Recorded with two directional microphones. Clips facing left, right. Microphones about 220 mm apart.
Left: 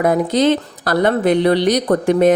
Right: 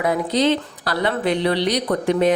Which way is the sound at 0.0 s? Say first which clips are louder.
Left 4 dB; 45° left (ahead or behind).